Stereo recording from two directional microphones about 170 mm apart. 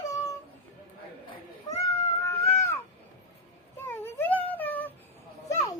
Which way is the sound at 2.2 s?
15° left (ahead or behind).